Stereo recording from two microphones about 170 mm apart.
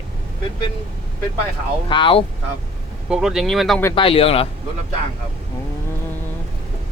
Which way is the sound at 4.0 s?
35° left (ahead or behind).